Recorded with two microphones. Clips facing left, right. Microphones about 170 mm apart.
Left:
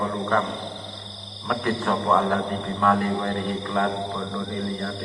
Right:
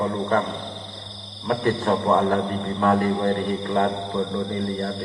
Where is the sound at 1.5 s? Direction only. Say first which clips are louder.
Right 3 dB; 40° right (ahead or behind).